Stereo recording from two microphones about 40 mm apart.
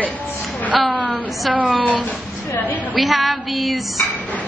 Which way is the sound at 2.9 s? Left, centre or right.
Centre.